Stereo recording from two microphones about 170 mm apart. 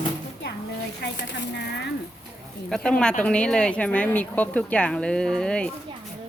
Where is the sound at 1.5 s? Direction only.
90° left.